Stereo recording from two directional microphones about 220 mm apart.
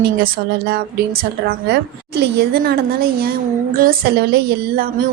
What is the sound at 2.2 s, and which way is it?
A woman's voice, 45° right (ahead or behind).